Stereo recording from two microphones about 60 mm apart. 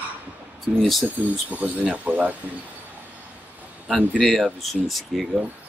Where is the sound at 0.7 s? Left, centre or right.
Centre.